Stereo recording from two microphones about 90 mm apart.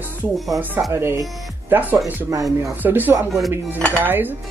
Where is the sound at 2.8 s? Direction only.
20° right (ahead or behind).